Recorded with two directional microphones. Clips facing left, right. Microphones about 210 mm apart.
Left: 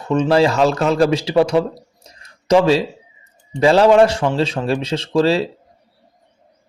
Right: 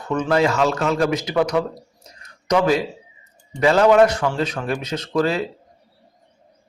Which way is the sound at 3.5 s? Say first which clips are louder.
Left 3 dB; 30° left (ahead or behind).